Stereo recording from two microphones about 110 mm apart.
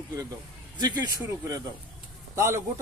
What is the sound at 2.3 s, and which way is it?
Speech, 25° right (ahead or behind).